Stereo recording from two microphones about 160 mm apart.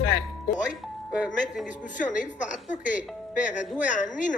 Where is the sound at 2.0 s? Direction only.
50° left (ahead or behind).